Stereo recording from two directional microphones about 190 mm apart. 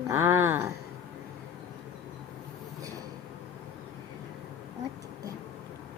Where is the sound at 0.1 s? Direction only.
10° right (ahead or behind).